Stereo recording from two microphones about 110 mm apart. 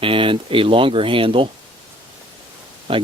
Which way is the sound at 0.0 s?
55° right (ahead or behind).